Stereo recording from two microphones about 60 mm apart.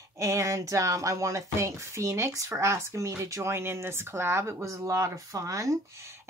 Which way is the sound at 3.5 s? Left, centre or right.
Right.